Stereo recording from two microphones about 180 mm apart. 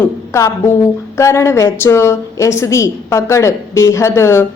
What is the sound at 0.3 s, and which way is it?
A woman's voice, 15° left (ahead or behind).